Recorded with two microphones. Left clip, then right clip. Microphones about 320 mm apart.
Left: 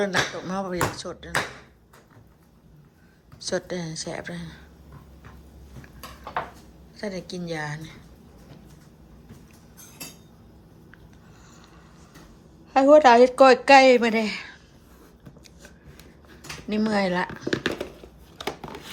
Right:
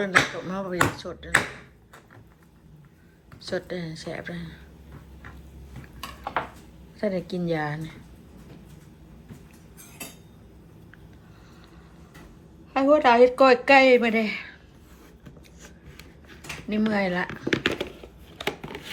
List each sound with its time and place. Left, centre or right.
0.0 s speech: centre
3.4 s speech: centre
6.9 s speech: centre
12.7 s speech: centre
16.6 s speech: centre
18.4 s a sound: centre